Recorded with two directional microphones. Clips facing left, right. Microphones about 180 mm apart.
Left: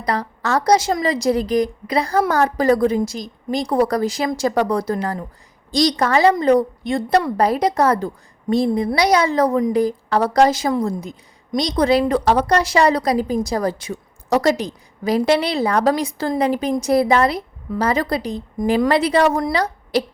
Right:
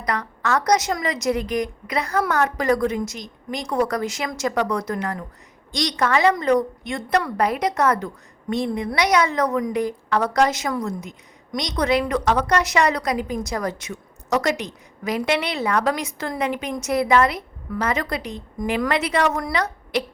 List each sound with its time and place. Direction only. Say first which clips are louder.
0.0 s a woman's voice: left 3 dB; 30° left (ahead or behind)